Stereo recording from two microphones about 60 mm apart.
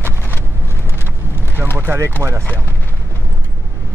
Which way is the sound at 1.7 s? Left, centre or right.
Right.